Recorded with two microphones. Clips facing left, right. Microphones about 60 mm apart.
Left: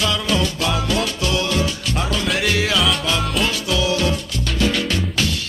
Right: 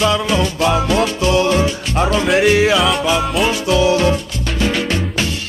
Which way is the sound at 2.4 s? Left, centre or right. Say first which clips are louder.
Right 8 dB; right.